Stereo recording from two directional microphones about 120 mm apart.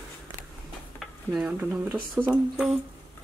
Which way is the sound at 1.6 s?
20° right (ahead or behind).